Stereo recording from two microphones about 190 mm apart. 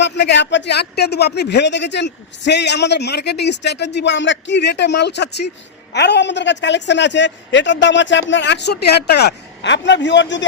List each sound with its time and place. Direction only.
0.0 s a woman's voice: 65° left (ahead or behind)